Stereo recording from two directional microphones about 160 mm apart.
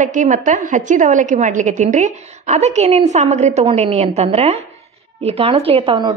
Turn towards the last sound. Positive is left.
turn(degrees=-35)  # may be behind; listen again after turning